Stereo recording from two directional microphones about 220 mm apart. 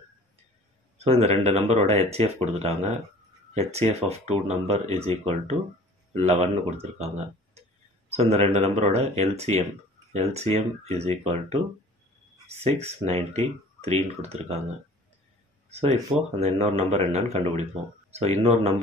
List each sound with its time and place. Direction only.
0.9 s speech: 30° right (ahead or behind)
8.1 s speech: 30° right (ahead or behind)
12.5 s speech: 30° right (ahead or behind)
15.7 s speech: 30° right (ahead or behind)